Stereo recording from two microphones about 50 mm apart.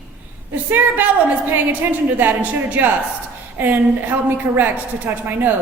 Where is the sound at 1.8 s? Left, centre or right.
Right.